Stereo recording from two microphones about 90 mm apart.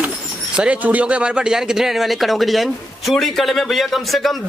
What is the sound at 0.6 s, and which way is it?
Speech, 15° right (ahead or behind).